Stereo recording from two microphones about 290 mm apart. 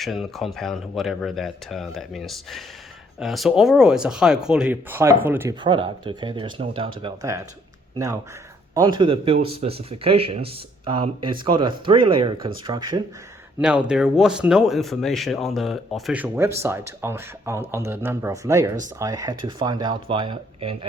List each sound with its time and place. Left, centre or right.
0.0 s speech: centre
13.8 s speech: centre